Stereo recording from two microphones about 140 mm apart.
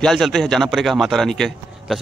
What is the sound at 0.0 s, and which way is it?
A man's voice, centre (ahead or behind).